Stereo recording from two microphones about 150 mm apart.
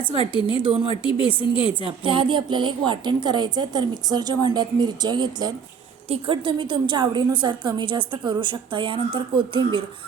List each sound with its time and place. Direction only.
0.4 s a woman's voice: 35° right (ahead or behind)